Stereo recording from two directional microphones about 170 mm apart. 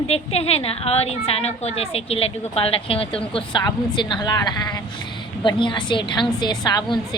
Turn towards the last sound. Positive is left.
turn(degrees=25)  # may be behind; listen again after turning